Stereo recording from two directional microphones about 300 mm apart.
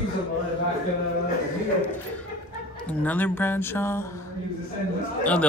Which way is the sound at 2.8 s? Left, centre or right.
Centre.